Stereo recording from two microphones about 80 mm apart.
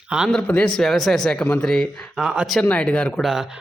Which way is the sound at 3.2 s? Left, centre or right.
Centre.